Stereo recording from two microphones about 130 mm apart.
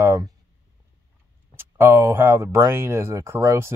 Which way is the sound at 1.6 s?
20° right (ahead or behind).